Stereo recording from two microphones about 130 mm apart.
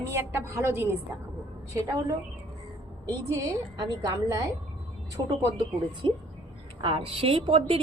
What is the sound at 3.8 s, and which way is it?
Speech, 30° right (ahead or behind).